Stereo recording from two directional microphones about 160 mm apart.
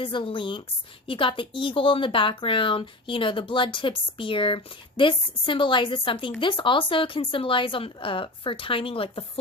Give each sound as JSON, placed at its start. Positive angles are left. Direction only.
{"t": 0.0, "sound": "speech", "side_deg": 30}